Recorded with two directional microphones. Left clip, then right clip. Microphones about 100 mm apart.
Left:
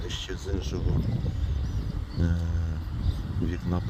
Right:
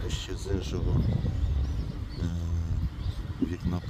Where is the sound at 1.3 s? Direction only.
20° right (ahead or behind).